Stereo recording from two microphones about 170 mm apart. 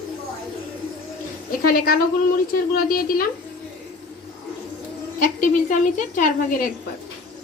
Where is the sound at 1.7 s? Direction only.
60° left (ahead or behind).